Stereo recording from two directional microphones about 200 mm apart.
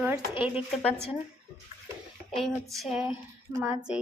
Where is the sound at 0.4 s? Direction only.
5° right (ahead or behind).